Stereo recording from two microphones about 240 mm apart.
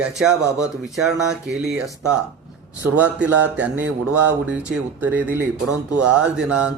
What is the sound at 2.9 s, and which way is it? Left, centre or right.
Speech, centre.